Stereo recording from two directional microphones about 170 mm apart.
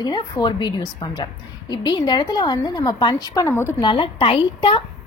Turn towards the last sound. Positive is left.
turn(degrees=35)  # may be behind; listen again after turning